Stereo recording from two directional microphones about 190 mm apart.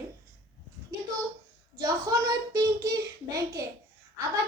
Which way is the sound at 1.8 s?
20° right (ahead or behind).